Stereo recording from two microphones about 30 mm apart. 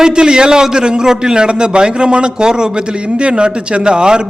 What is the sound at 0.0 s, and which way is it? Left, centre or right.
A man's voice, right.